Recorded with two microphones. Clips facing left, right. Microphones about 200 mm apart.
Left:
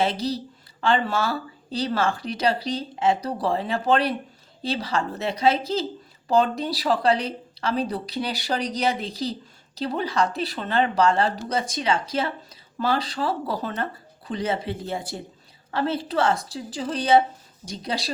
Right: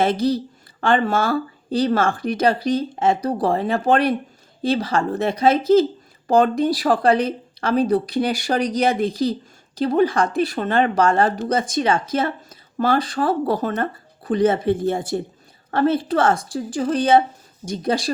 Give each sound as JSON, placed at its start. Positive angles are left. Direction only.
{"t": 0.0, "sound": "speech", "side_deg": -50}